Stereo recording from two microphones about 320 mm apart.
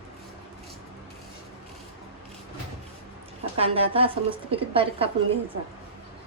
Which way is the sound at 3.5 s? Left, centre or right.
Centre.